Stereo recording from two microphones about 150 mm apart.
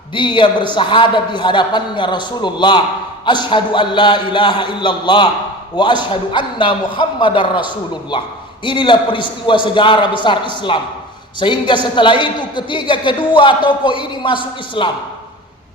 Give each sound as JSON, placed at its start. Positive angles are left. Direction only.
{"t": 0.1, "sound": "a man's voice", "side_deg": 30}